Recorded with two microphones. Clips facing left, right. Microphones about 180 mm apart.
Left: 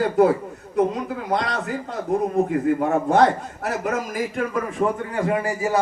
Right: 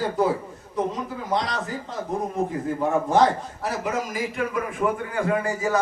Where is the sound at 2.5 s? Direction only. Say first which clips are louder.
Left 4 dB; 70° left (ahead or behind).